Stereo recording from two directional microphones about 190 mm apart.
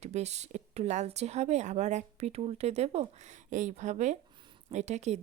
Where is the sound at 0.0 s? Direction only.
35° right (ahead or behind).